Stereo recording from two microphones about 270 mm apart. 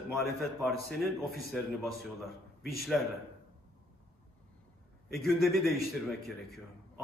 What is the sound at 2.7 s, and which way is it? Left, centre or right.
Speech, centre.